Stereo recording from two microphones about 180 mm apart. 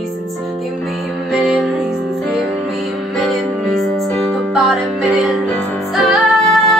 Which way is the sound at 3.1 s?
Centre (ahead or behind).